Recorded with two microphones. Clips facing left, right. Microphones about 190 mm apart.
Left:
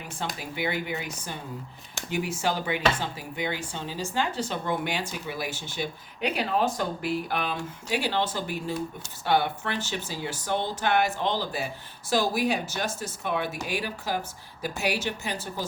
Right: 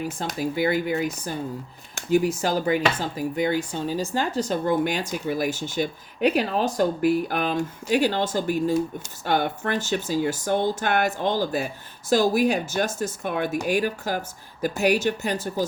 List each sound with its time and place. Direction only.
0.3 s speech: 40° right (ahead or behind)